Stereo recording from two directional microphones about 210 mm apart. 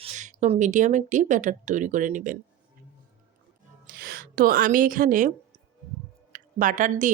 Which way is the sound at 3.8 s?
45° right (ahead or behind).